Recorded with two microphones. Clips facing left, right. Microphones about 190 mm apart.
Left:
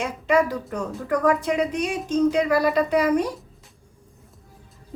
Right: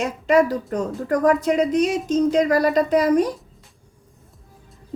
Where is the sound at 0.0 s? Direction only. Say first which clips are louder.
Right 3 dB; 40° right (ahead or behind).